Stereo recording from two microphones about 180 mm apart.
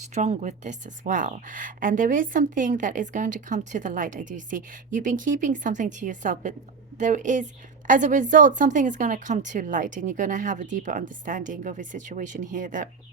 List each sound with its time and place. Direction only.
0.1 s a woman's voice: 40° right (ahead or behind)